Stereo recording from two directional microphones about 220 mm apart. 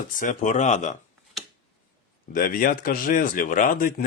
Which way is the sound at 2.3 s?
40° left (ahead or behind).